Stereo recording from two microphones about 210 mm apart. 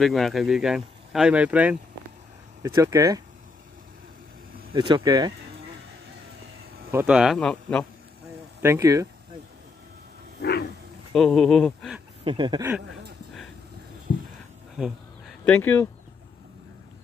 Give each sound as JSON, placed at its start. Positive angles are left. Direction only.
{"t": 0.0, "sound": "speech", "side_deg": 0}
{"t": 4.7, "sound": "speech", "side_deg": -20}
{"t": 6.9, "sound": "speech", "side_deg": -10}
{"t": 8.6, "sound": "speech", "side_deg": -15}
{"t": 11.1, "sound": "speech", "side_deg": 5}
{"t": 12.3, "sound": "speech", "side_deg": -20}
{"t": 14.8, "sound": "a sound", "side_deg": 0}